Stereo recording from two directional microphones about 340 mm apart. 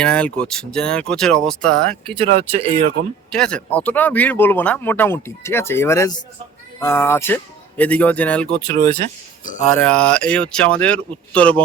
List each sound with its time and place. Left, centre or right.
0.0 s speech: centre
2.0 s speech: centre
3.3 s speech: centre
9.4 s speech: left
9.6 s speech: centre